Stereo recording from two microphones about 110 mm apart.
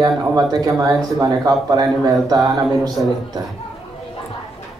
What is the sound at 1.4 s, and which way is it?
Speech, 35° right (ahead or behind).